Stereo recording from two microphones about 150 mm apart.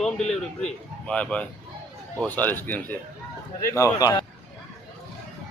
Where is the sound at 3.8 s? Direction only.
25° left (ahead or behind).